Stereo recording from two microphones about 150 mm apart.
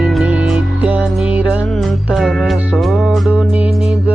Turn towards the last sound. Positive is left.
turn(degrees=-5)  # may be behind; listen again after turning